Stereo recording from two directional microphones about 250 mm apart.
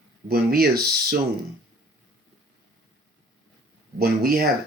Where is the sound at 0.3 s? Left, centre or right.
Right.